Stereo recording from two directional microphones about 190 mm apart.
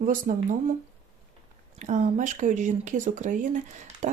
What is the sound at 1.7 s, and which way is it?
Speech, 40° right (ahead or behind).